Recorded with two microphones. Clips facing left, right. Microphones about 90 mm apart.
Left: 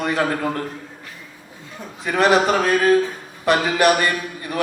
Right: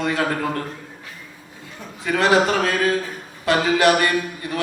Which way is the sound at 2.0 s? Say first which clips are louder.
Left 1 dB; 20° left (ahead or behind).